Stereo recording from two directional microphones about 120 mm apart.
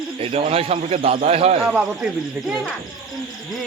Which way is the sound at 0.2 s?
60° right (ahead or behind).